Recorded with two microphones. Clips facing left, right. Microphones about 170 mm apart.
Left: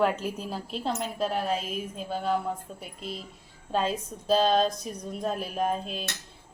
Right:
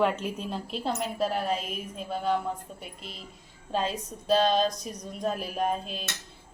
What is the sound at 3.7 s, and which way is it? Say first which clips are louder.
Speech: left 2 dB; centre (ahead or behind).